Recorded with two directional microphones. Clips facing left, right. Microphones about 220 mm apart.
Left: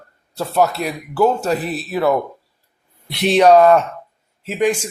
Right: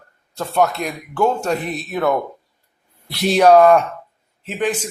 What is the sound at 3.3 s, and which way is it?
A man's voice, centre (ahead or behind).